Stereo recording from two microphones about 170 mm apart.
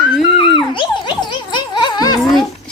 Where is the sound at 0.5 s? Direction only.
30° left (ahead or behind).